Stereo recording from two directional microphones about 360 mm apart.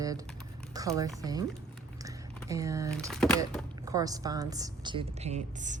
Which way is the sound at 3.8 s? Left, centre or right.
Centre.